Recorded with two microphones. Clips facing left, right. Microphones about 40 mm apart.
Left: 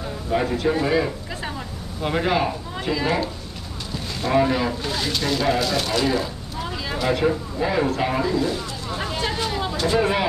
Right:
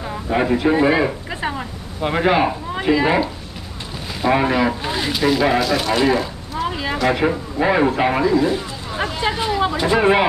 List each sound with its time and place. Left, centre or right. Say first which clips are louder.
0.3 s speech: right 4 dB; right; by 5.9 s centre
5.9 s a sound: right 4 dB; centre
7.1 s speech: right 1 dB; right